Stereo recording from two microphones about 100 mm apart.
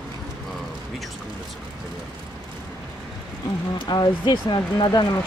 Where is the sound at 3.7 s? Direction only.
50° left (ahead or behind).